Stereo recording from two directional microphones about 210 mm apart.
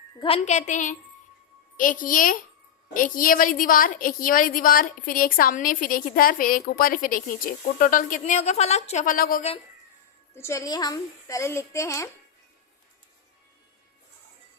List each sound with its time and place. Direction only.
0.2 s a woman's voice: 30° left (ahead or behind)
10.3 s a woman's voice: 15° left (ahead or behind)